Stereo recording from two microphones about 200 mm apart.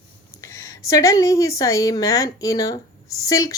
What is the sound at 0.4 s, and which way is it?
Speech, 15° left (ahead or behind).